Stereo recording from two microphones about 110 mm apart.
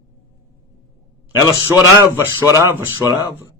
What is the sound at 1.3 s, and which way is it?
Speech, 35° left (ahead or behind).